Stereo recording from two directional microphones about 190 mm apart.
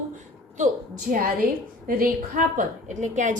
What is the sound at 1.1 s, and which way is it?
A woman's voice, 45° right (ahead or behind).